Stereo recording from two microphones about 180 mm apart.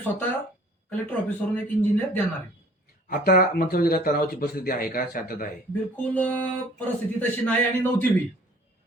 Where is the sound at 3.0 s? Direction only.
50° left (ahead or behind).